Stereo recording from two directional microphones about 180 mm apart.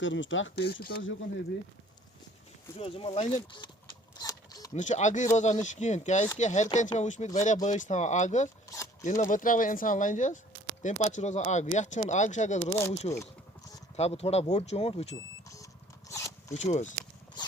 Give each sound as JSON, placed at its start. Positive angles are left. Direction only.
{"t": 0.0, "sound": "speech", "side_deg": 90}
{"t": 2.7, "sound": "speech", "side_deg": 30}
{"t": 3.6, "sound": "speech", "side_deg": 25}
{"t": 4.2, "sound": "a sound", "side_deg": 20}
{"t": 4.7, "sound": "speech", "side_deg": 40}
{"t": 8.7, "sound": "a sound", "side_deg": 15}
{"t": 9.0, "sound": "speech", "side_deg": 45}
{"t": 15.1, "sound": "smoke detector", "side_deg": 20}
{"t": 16.6, "sound": "speech", "side_deg": 40}